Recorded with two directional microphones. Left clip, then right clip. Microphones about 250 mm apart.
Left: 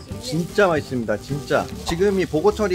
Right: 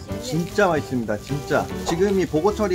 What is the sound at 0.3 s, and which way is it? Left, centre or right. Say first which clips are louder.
Speech: left 2 dB; centre.